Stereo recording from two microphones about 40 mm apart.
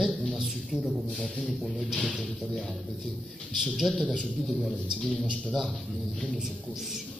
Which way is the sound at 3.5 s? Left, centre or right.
Centre.